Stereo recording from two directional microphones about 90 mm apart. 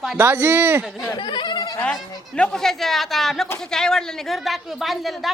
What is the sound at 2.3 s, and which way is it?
Speech, 10° left (ahead or behind).